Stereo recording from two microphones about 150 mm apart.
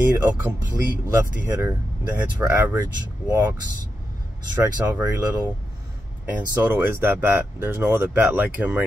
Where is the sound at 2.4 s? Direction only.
10° right (ahead or behind).